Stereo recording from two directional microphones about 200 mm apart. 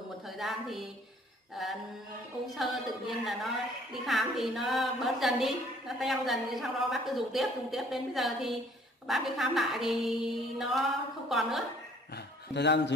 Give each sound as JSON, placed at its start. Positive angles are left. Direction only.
{"t": 0.4, "sound": "a woman's voice", "side_deg": 0}
{"t": 12.5, "sound": "a man's voice", "side_deg": 60}